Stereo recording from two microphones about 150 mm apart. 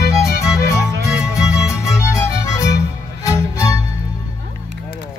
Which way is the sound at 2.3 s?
20° left (ahead or behind).